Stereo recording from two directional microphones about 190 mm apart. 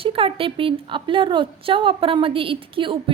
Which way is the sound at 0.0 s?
30° right (ahead or behind).